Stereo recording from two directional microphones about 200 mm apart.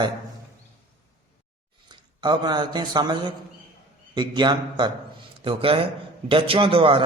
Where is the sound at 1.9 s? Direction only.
20° right (ahead or behind).